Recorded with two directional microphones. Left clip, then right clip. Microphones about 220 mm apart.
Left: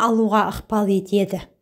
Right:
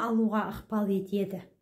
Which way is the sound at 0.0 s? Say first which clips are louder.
Left 12 dB; 35° left (ahead or behind).